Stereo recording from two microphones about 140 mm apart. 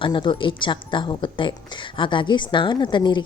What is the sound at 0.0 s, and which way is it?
Speech, 35° left (ahead or behind).